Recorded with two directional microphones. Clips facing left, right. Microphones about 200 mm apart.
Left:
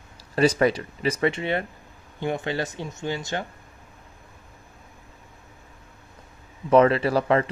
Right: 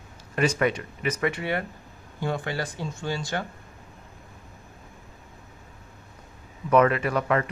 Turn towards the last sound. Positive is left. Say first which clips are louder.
# left 3 dB
turn(degrees=30)  # may be behind; listen again after turning